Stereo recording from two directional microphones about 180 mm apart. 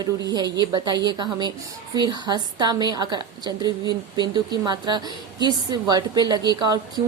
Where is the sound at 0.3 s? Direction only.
20° right (ahead or behind).